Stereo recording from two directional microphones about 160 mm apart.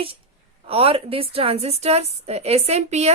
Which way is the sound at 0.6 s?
40° right (ahead or behind).